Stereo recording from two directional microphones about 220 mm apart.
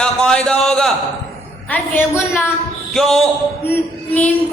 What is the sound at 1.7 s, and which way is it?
A woman's voice, 10° left (ahead or behind).